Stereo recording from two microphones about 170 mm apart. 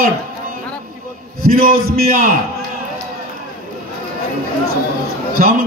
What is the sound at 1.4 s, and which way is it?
Speech, 60° right (ahead or behind).